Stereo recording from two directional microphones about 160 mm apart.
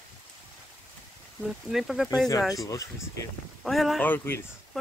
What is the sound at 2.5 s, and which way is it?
Speech, 20° left (ahead or behind).